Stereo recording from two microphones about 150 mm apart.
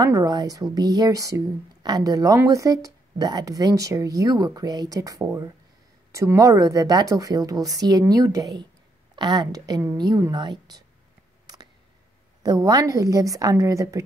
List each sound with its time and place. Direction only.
0.0 s a woman's voice: 25° right (ahead or behind)
11.4 s a sound: 30° right (ahead or behind)
12.4 s a woman's voice: 25° right (ahead or behind)